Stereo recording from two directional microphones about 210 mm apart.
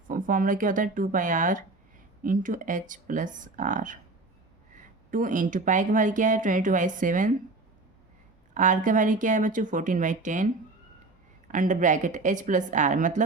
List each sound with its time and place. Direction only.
0.1 s speech: 40° right (ahead or behind)
5.1 s speech: 40° right (ahead or behind)
8.5 s speech: 40° right (ahead or behind)